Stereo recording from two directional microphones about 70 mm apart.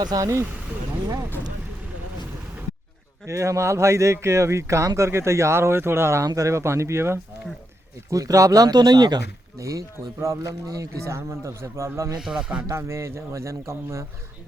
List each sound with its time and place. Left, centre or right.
0.0 s speech: right
3.2 s speech: right
6.2 s speech: right
8.1 s speech: right
9.6 s speech: right
12.2 s speech: centre
12.6 s speech: right